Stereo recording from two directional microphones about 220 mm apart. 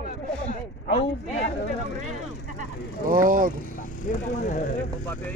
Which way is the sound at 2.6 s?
40° right (ahead or behind).